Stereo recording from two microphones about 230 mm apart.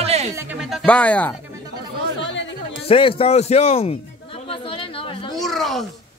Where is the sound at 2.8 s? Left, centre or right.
Left.